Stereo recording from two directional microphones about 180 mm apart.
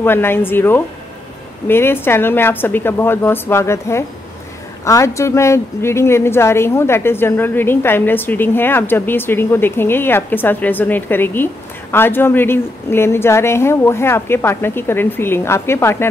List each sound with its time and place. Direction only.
0.0 s a woman's voice: 10° left (ahead or behind)